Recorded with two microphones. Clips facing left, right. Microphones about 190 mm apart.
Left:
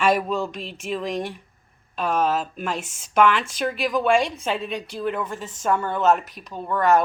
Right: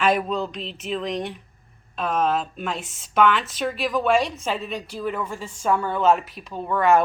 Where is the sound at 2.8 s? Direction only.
45° left (ahead or behind).